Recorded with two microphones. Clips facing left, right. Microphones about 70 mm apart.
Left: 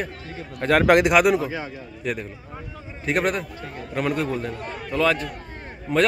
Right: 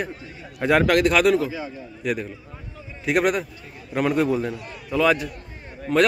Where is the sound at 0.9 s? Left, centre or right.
Left.